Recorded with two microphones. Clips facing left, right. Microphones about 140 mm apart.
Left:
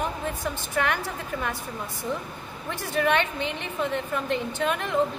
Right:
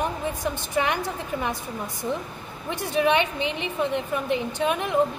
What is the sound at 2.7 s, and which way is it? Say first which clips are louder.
A woman's voice: right 2 dB; 15° right (ahead or behind).